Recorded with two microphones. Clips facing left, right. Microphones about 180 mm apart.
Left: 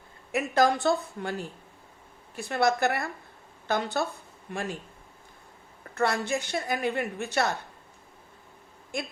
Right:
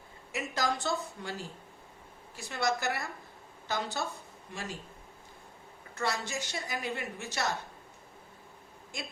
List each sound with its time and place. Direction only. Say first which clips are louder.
0.3 s a woman's voice: left 9 dB; 60° left (ahead or behind)
5.9 s a woman's voice: left 7 dB; 60° left (ahead or behind)